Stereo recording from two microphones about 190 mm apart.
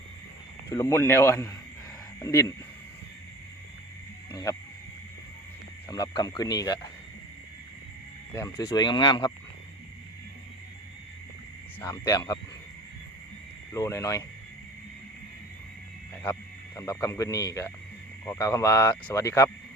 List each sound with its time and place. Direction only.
0.7 s speech: 15° left (ahead or behind)
4.3 s speech: 15° left (ahead or behind)
5.9 s speech: 20° left (ahead or behind)
8.3 s speech: 15° left (ahead or behind)
11.8 s speech: 20° left (ahead or behind)
13.7 s speech: 15° left (ahead or behind)
16.2 s speech: 15° left (ahead or behind)